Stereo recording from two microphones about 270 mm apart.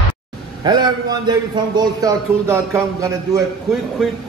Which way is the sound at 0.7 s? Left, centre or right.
Centre.